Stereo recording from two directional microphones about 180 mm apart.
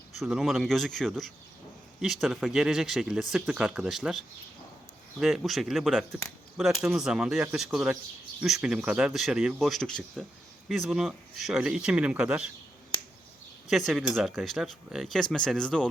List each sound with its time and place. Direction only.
0.2 s speech: centre (ahead or behind)
5.2 s speech: centre (ahead or behind)
13.7 s speech: centre (ahead or behind)